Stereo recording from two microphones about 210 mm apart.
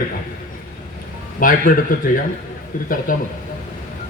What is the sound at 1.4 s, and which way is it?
Speech, 40° left (ahead or behind).